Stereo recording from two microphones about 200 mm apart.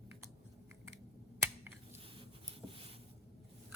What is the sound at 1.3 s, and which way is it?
Finger snapping, 10° right (ahead or behind).